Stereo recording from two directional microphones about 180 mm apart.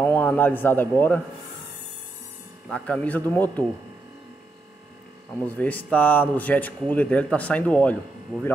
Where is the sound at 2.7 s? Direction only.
5° left (ahead or behind).